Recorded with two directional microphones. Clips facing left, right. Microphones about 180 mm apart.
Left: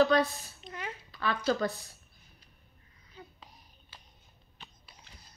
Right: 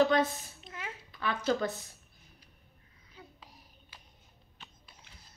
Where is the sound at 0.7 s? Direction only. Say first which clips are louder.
Left 3 dB; 5° right (ahead or behind).